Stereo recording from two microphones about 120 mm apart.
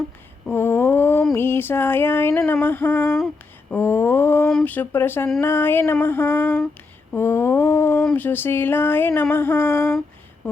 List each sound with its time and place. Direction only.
0.5 s a sound: 20° left (ahead or behind)
1.3 s female singing: 20° left (ahead or behind)
4.6 s speech: 15° left (ahead or behind)
5.4 s female singing: 20° left (ahead or behind)
8.1 s speech: 15° left (ahead or behind)
9.3 s female singing: 20° left (ahead or behind)